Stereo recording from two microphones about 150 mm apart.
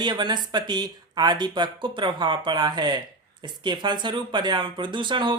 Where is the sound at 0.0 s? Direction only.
30° right (ahead or behind).